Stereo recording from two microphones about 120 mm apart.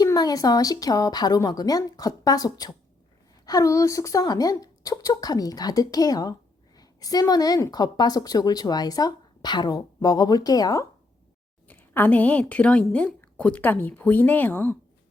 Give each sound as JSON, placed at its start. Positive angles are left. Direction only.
{"t": 0.0, "sound": "a woman's voice", "side_deg": 30}
{"t": 11.7, "sound": "a woman's voice", "side_deg": 15}